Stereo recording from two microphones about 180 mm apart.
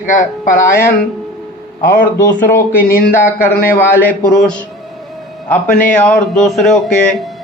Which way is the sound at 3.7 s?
5° left (ahead or behind).